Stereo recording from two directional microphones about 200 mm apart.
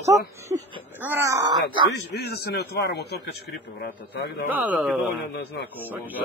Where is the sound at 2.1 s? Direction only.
55° left (ahead or behind).